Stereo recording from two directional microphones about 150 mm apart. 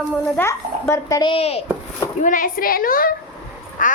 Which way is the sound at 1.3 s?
40° left (ahead or behind).